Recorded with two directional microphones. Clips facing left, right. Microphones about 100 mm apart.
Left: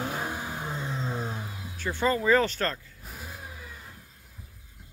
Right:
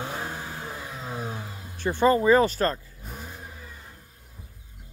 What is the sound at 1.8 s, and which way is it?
Speech, 20° right (ahead or behind).